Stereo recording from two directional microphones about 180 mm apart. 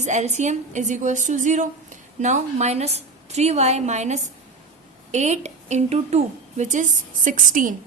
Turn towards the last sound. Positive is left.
turn(degrees=-45)  # may be behind; listen again after turning